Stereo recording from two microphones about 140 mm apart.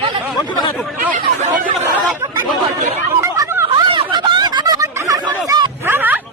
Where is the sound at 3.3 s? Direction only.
20° right (ahead or behind).